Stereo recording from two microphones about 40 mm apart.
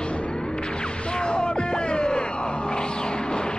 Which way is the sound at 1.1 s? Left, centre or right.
Left.